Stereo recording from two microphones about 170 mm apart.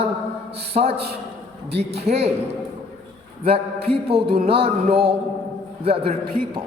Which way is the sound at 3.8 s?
35° right (ahead or behind).